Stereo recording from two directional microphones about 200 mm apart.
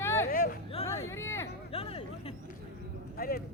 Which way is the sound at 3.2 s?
45° left (ahead or behind).